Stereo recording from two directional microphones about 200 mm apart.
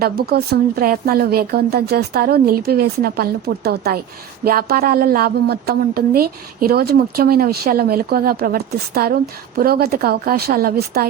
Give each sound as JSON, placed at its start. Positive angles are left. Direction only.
{"t": 0.3, "sound": "a woman's voice", "side_deg": -50}